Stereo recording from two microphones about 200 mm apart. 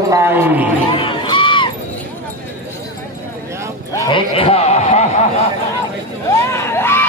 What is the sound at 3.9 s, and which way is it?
Sheep, 15° left (ahead or behind).